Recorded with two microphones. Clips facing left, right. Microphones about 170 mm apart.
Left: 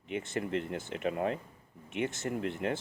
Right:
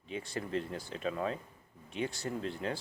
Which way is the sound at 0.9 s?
60° left (ahead or behind).